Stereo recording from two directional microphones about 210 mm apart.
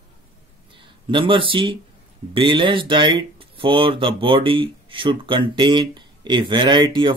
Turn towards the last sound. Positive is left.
turn(degrees=-20)  # may be behind; listen again after turning